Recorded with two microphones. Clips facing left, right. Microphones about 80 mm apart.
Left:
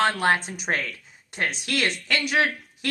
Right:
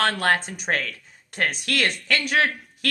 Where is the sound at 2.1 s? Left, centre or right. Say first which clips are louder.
Right 1 dB; right.